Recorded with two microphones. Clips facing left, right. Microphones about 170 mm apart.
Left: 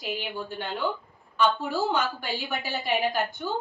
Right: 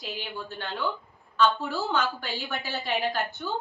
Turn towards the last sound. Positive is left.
turn(degrees=15)  # may be behind; listen again after turning